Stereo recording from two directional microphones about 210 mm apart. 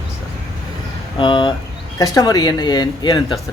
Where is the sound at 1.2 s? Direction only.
20° left (ahead or behind).